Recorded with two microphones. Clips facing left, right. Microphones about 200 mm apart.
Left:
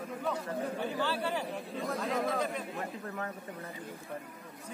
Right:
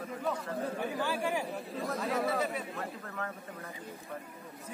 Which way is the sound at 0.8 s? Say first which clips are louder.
Even; 10° right (ahead or behind).